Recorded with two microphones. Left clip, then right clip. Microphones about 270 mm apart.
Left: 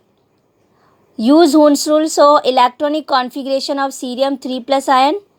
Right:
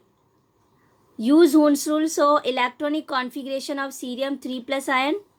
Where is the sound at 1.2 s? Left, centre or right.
Left.